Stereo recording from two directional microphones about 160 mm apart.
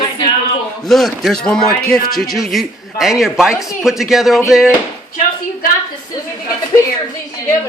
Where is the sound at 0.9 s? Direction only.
Centre (ahead or behind).